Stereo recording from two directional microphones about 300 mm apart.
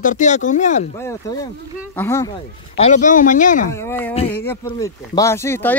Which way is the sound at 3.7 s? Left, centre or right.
Centre.